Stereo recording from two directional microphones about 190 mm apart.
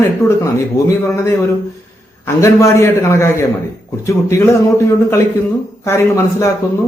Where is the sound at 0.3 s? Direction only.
15° left (ahead or behind).